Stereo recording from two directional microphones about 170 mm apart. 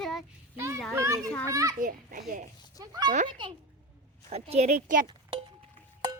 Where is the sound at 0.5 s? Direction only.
15° right (ahead or behind).